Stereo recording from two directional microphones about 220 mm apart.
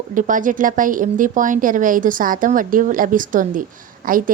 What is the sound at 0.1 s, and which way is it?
A woman's voice, 35° right (ahead or behind).